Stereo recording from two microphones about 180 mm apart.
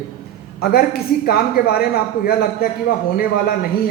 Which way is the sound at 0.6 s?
60° left (ahead or behind).